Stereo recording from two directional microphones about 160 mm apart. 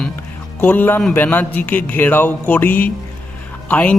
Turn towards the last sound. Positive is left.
turn(degrees=10)  # may be behind; listen again after turning